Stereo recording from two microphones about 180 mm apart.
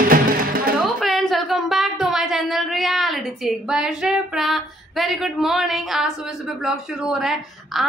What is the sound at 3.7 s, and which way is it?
Female singing, 5° right (ahead or behind).